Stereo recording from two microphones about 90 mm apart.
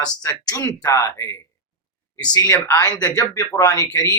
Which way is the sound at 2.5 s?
25° left (ahead or behind).